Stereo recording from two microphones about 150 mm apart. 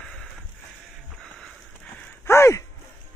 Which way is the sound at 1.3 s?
5° left (ahead or behind).